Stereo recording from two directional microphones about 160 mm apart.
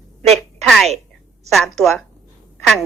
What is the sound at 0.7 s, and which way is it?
A woman's voice, centre (ahead or behind).